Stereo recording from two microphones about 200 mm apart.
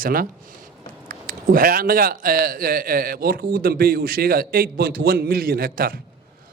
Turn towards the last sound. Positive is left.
turn(degrees=-45)  # may be behind; listen again after turning